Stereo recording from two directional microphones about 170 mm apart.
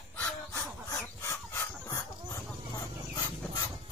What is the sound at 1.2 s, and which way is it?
Chicken, 15° left (ahead or behind).